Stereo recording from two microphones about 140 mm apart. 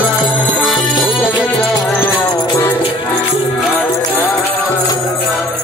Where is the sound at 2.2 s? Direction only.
25° left (ahead or behind).